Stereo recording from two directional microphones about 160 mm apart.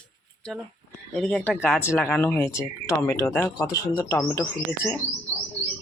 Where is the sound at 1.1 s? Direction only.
5° left (ahead or behind).